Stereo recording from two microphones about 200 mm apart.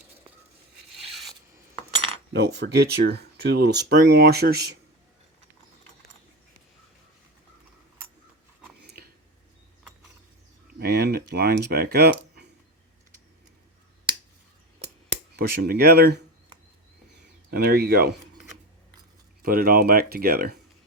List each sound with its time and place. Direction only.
2.3 s speech: 55° right (ahead or behind)
8.8 s a sound: 55° right (ahead or behind)
10.8 s a sound: 55° right (ahead or behind)
15.4 s speech: 50° right (ahead or behind)
17.5 s speech: 55° right (ahead or behind)
19.4 s speech: 50° right (ahead or behind)